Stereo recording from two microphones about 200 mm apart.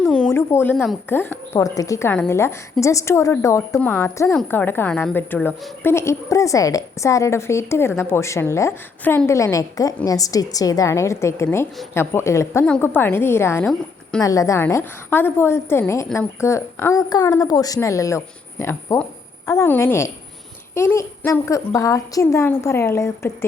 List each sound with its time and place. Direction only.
0.0 s a woman's voice: 5° left (ahead or behind)